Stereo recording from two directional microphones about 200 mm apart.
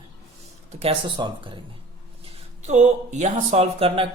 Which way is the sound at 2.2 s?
35° right (ahead or behind).